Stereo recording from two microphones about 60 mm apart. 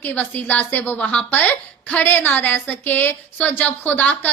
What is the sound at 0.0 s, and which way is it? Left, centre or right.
A woman's voice, left.